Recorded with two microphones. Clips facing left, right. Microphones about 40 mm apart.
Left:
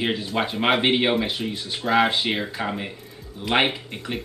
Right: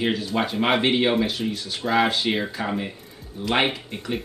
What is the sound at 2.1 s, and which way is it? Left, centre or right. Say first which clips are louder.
Speech: even; centre.